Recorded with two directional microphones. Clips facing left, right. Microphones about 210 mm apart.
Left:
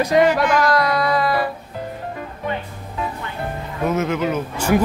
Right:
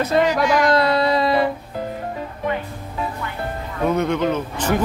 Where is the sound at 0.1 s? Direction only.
15° left (ahead or behind).